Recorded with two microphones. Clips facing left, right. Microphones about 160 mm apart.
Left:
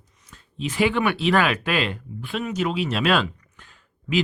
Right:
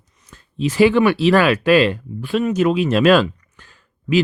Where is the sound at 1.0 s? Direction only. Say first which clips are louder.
Right 8 dB; 35° right (ahead or behind).